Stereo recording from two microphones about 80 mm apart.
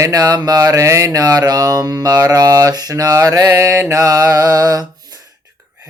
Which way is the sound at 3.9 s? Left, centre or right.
Right.